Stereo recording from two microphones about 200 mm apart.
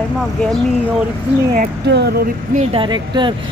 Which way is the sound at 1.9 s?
55° right (ahead or behind).